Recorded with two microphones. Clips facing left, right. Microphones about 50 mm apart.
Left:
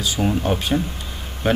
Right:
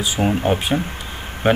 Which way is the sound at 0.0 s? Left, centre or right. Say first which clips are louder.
Right 2 dB; right.